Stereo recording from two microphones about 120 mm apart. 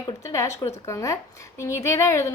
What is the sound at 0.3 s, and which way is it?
Speech, 25° left (ahead or behind).